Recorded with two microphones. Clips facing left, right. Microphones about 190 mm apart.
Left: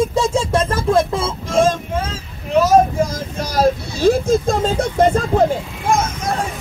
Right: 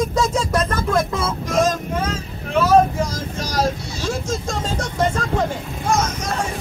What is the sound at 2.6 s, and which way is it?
Speech, 50° left (ahead or behind).